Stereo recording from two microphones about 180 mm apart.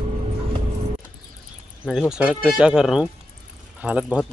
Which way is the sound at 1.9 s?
5° right (ahead or behind).